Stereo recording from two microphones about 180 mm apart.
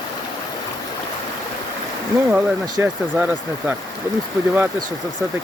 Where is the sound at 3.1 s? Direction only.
10° right (ahead or behind).